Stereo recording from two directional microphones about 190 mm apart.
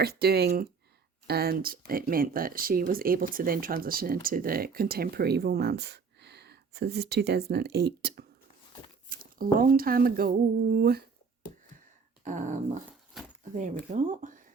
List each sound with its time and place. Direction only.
0.0 s speech: 55° right (ahead or behind)
9.0 s speech: 50° right (ahead or behind)
12.2 s dog: 40° right (ahead or behind)
13.9 s speech: 40° right (ahead or behind)